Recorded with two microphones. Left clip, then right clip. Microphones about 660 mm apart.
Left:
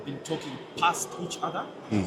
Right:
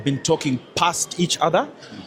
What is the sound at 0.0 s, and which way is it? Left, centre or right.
Speech, right.